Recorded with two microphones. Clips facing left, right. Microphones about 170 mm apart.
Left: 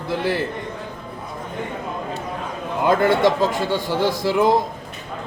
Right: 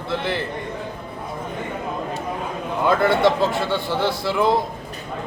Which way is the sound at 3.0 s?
15° left (ahead or behind).